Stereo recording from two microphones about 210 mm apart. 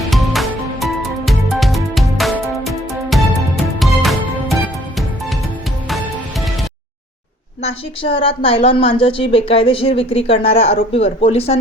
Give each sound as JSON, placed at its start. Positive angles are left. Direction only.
{"t": 0.1, "sound": "music", "side_deg": 0}
{"t": 7.6, "sound": "a woman's voice", "side_deg": 25}